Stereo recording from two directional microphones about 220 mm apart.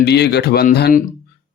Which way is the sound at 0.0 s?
50° left (ahead or behind).